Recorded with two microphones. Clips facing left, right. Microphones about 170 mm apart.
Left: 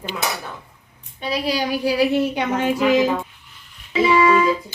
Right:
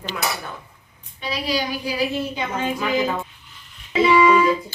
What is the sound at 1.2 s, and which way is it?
Speech, 50° left (ahead or behind).